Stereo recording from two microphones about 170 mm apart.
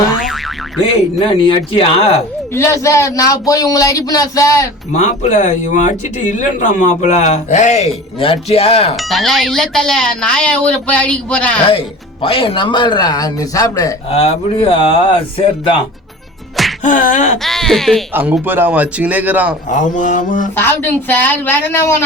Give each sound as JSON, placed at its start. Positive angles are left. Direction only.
{"t": 0.2, "sound": "boing", "side_deg": 0}
{"t": 1.4, "sound": "speech", "side_deg": 30}
{"t": 2.5, "sound": "a woman's voice", "side_deg": 15}
{"t": 4.9, "sound": "a man's voice", "side_deg": 45}
{"t": 9.0, "sound": "speech", "side_deg": 0}
{"t": 12.2, "sound": "speech", "side_deg": 35}
{"t": 14.1, "sound": "speech", "side_deg": 35}
{"t": 16.8, "sound": "a man's voice", "side_deg": 50}
{"t": 17.4, "sound": "speech", "side_deg": 0}
{"t": 18.1, "sound": "speech", "side_deg": -10}
{"t": 19.6, "sound": "a man's voice", "side_deg": 45}
{"t": 20.6, "sound": "a woman's voice", "side_deg": 10}